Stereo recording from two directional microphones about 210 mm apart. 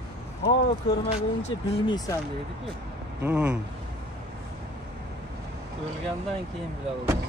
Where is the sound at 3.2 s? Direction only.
10° right (ahead or behind).